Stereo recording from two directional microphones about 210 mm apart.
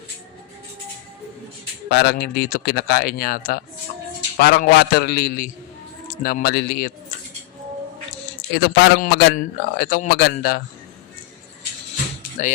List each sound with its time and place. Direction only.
1.9 s a man's voice: 50° left (ahead or behind)
8.5 s a man's voice: 50° left (ahead or behind)
12.4 s speech: 35° left (ahead or behind)